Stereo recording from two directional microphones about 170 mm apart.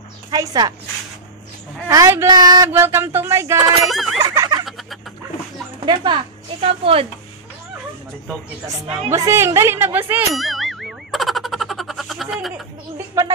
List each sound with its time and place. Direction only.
0.3 s speech: 20° right (ahead or behind)
1.9 s speech: 15° right (ahead or behind)
3.9 s a sound: centre (ahead or behind)
4.2 s a sound: 25° right (ahead or behind)
5.9 s speech: 30° right (ahead or behind)
9.1 s speech: 15° right (ahead or behind)
10.3 s boing: centre (ahead or behind)
12.9 s speech: 15° right (ahead or behind)